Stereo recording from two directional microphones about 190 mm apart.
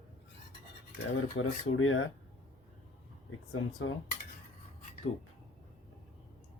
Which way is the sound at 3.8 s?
90° left.